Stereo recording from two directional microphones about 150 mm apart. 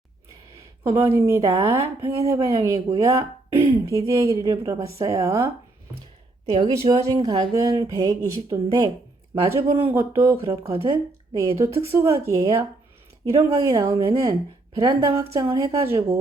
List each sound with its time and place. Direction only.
0.9 s speech: 15° right (ahead or behind)
6.6 s speech: 25° right (ahead or behind)